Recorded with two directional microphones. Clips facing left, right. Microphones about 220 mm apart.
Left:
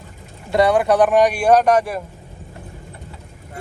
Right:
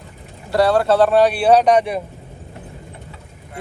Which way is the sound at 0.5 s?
20° left (ahead or behind).